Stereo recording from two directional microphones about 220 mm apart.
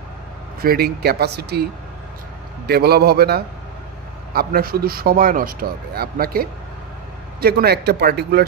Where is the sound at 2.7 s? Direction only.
45° right (ahead or behind).